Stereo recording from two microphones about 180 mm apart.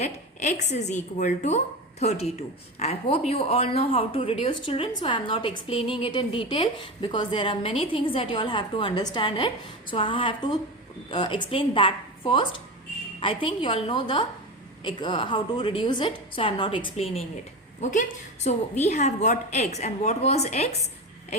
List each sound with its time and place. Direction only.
0.0 s a woman's voice: 40° left (ahead or behind)
17.7 s a woman's voice: 40° left (ahead or behind)